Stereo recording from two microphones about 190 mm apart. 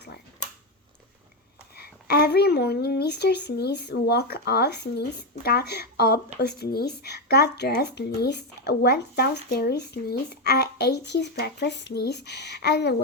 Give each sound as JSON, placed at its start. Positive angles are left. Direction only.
{"t": 1.7, "sound": "a woman's voice", "side_deg": 55}